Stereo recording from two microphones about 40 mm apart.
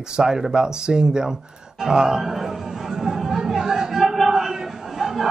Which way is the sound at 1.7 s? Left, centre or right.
Centre.